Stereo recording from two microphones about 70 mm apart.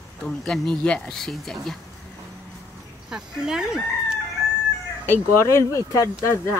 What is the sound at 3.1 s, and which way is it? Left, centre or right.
Speech, centre.